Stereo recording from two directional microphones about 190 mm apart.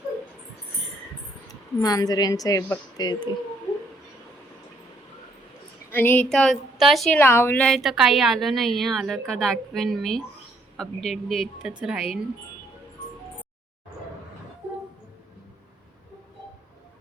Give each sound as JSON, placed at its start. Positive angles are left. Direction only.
{"t": 1.8, "sound": "a woman's voice", "side_deg": 20}
{"t": 5.9, "sound": "a woman's voice", "side_deg": 10}